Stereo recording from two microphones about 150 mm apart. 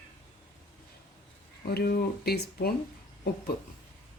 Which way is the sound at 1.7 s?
90° left.